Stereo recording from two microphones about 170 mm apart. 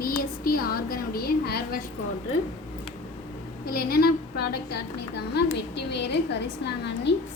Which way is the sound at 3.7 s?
60° left (ahead or behind).